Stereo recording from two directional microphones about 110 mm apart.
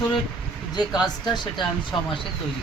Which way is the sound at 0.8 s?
40° left (ahead or behind).